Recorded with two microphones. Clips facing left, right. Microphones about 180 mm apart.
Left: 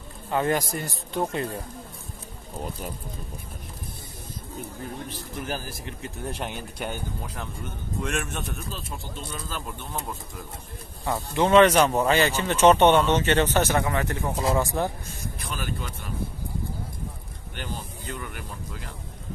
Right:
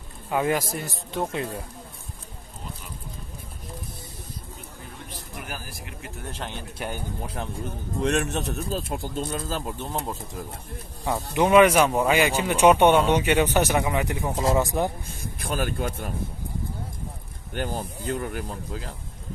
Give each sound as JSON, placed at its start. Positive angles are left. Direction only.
{"t": 0.3, "sound": "speech", "side_deg": -5}
{"t": 5.5, "sound": "speech", "side_deg": 30}
{"t": 6.3, "sound": "a man's voice", "side_deg": 15}
{"t": 7.3, "sound": "a man's voice", "side_deg": -35}
{"t": 9.7, "sound": "speech", "side_deg": -25}
{"t": 11.1, "sound": "speech", "side_deg": -15}
{"t": 15.3, "sound": "speech", "side_deg": -50}
{"t": 17.6, "sound": "a man's voice", "side_deg": -50}